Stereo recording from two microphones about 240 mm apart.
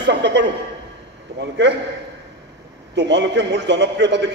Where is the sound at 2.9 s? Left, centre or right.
Right.